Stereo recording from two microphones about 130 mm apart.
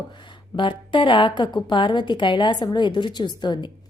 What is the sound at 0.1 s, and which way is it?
A woman's voice, 35° left (ahead or behind).